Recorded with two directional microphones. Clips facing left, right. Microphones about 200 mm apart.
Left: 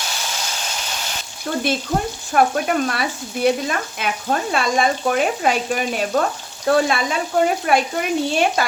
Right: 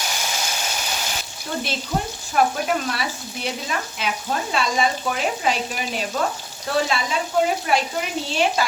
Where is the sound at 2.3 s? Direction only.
55° left (ahead or behind).